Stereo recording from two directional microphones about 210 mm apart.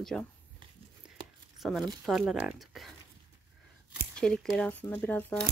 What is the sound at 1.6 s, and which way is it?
Speech, 5° right (ahead or behind).